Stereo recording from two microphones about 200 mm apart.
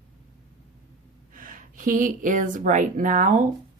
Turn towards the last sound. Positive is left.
turn(degrees=-40)  # may be behind; listen again after turning